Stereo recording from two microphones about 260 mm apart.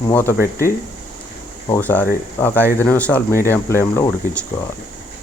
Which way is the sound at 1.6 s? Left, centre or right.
Centre.